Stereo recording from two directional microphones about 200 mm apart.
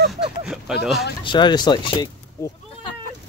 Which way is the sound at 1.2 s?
20° left (ahead or behind).